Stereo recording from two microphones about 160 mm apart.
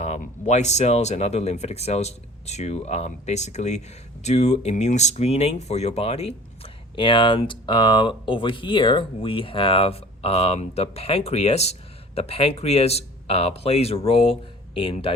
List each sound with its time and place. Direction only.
0.0 s speech: 45° left (ahead or behind)